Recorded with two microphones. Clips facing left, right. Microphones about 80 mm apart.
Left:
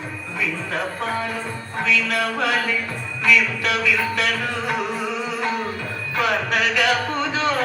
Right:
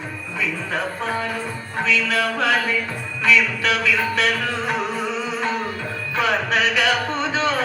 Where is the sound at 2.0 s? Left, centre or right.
Right.